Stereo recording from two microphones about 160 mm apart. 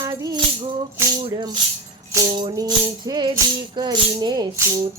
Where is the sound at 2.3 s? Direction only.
30° right (ahead or behind).